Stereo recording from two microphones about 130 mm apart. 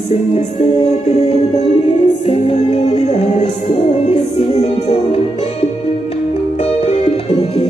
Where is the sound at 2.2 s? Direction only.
50° left (ahead or behind).